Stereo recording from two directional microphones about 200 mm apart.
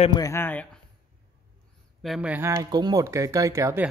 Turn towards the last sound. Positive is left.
turn(degrees=-15)  # may be behind; listen again after turning